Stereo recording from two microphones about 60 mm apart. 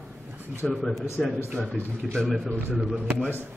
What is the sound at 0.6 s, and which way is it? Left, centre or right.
Speech, centre.